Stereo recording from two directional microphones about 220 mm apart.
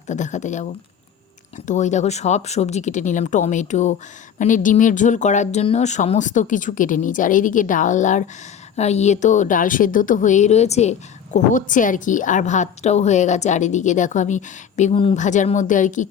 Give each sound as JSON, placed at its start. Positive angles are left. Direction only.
{"t": 0.1, "sound": "a woman's voice", "side_deg": 35}